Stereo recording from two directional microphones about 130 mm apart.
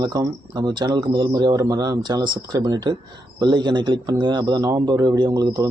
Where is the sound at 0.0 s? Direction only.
30° right (ahead or behind).